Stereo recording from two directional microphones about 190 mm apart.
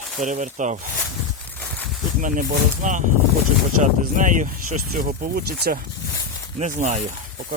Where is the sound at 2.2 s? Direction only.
45° right (ahead or behind).